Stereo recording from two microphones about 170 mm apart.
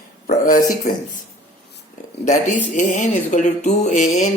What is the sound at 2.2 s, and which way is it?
Speech, 45° left (ahead or behind).